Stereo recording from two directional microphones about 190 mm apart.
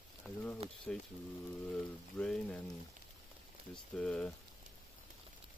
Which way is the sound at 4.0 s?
5° left (ahead or behind).